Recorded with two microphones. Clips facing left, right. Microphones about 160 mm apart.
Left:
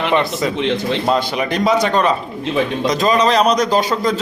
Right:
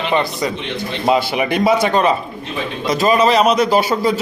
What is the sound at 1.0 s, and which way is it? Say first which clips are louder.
A man's voice: right 6 dB; 10° right (ahead or behind).